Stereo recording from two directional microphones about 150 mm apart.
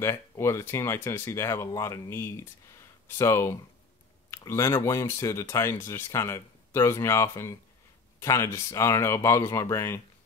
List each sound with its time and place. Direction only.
0.0 s speech: 20° left (ahead or behind)